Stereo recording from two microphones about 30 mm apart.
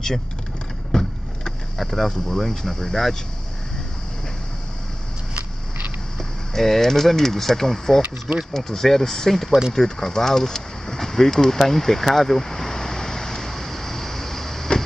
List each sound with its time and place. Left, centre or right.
0.9 s vehicle: left
1.8 s speech: centre
6.1 s speech: centre
12.1 s a sound: centre